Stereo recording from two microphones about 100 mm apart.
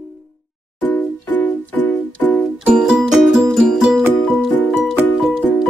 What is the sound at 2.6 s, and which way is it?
Music, 5° right (ahead or behind).